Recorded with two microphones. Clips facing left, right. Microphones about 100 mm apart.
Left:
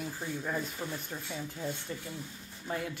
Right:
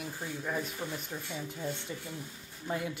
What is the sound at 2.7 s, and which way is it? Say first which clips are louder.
Speech: right 1 dB; 15° right (ahead or behind).